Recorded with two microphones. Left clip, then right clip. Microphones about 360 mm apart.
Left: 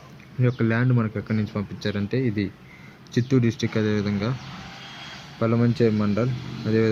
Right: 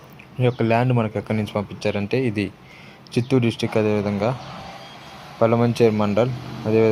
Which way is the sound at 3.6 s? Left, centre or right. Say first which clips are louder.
Right 5 dB; right.